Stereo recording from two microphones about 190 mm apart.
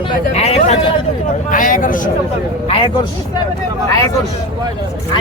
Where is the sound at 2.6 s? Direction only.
30° left (ahead or behind).